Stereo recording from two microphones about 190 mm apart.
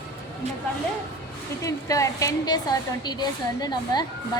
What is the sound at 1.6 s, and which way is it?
A woman's voice, 15° left (ahead or behind).